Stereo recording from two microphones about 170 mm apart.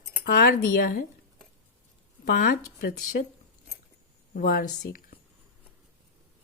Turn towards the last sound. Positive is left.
turn(degrees=60)  # may be behind; listen again after turning